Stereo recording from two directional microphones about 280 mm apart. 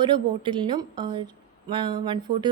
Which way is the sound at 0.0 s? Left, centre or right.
Centre.